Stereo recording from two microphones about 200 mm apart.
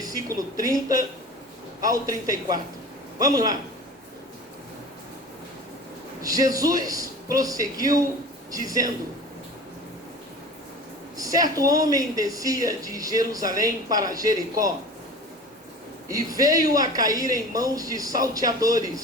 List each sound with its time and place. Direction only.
0.0 s speech: 15° right (ahead or behind)
6.2 s speech: 15° right (ahead or behind)
11.2 s a sound: 15° right (ahead or behind)
11.5 s speech: 20° right (ahead or behind)
16.0 s speech: 15° right (ahead or behind)